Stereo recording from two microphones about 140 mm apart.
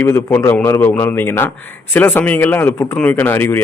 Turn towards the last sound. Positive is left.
turn(degrees=15)  # may be behind; listen again after turning